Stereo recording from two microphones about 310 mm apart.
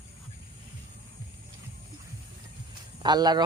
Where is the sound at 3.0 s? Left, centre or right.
Centre.